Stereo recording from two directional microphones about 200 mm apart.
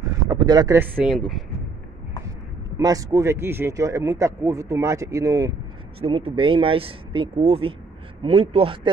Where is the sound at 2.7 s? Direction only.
15° right (ahead or behind).